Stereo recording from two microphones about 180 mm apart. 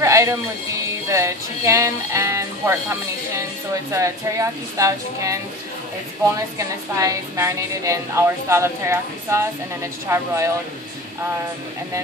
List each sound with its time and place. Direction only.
0.0 s music: 15° right (ahead or behind)
1.0 s speech: 15° right (ahead or behind)
6.6 s speech: 15° right (ahead or behind)